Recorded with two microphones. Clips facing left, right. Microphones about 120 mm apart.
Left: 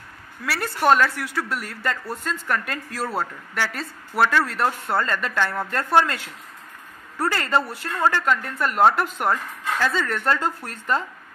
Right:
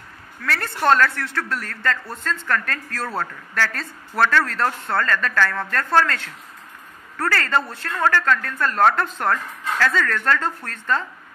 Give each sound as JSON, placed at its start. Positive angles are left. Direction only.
{"t": 0.4, "sound": "a man's voice", "side_deg": 10}